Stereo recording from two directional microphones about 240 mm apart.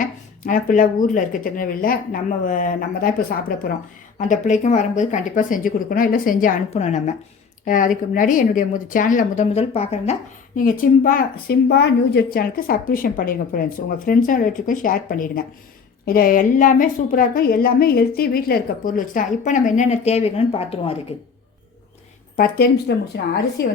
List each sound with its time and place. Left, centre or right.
0.0 s speech: left
22.4 s speech: left